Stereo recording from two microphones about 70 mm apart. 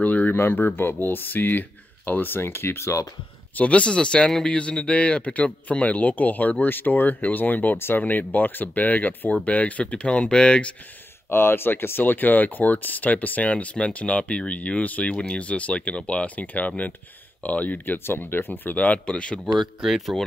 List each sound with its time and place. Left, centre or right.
0.0 s speech: left
3.5 s speech: centre
11.2 s speech: left; by 19.4 s centre
19.5 s speech: centre